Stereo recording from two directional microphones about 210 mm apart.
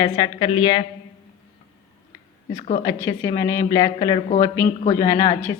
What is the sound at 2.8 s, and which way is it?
Speech, 15° left (ahead or behind).